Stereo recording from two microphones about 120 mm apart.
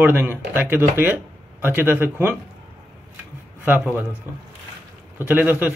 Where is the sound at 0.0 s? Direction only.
15° right (ahead or behind).